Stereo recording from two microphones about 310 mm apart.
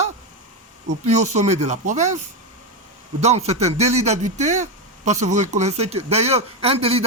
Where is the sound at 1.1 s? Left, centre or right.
Right.